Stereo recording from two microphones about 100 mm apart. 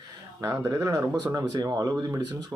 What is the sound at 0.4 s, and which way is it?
Speech, 35° right (ahead or behind).